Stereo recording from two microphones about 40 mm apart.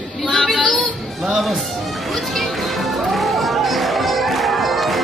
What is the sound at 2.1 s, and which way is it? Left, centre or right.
Music, centre.